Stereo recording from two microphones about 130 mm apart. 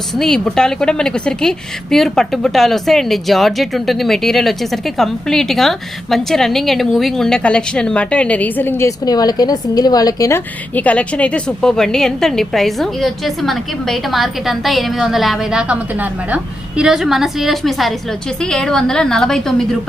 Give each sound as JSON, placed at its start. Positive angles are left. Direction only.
{"t": 0.2, "sound": "a woman's voice", "side_deg": 5}
{"t": 9.0, "sound": "a woman's voice", "side_deg": 30}
{"t": 10.8, "sound": "a woman's voice", "side_deg": 10}